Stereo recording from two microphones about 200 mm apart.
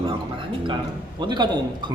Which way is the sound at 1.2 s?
20° right (ahead or behind).